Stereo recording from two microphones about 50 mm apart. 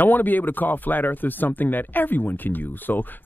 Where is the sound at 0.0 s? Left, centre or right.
Left.